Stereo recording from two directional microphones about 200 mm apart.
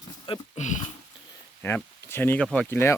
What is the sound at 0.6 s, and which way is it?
Speech, 35° left (ahead or behind).